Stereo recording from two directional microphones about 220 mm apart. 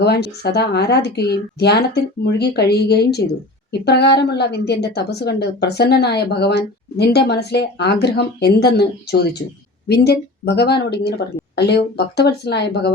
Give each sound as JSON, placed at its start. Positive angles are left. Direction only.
{"t": 0.0, "sound": "a woman's voice", "side_deg": 45}